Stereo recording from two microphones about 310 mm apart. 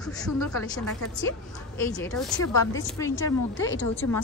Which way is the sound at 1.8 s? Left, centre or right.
Centre.